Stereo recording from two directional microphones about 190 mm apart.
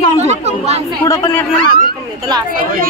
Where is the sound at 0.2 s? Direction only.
35° right (ahead or behind).